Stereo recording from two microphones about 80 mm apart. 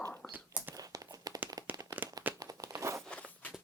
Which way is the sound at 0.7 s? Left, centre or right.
Right.